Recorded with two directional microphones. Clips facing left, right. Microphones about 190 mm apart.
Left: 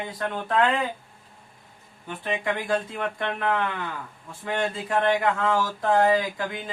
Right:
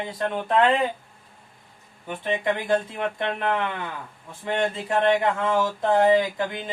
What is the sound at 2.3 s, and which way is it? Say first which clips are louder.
Speech: right 3 dB; 25° right (ahead or behind).